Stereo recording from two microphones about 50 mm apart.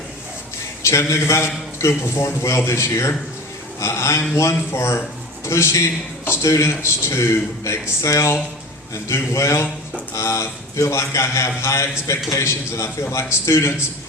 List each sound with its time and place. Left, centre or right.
0.9 s a man's voice: left
9.3 s a man's voice: left
10.2 s a man's voice: left